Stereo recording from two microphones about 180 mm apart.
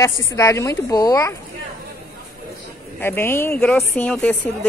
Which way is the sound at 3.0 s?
15° left (ahead or behind).